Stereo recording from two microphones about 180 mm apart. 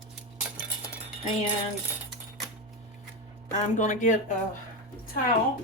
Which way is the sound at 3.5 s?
45° left (ahead or behind).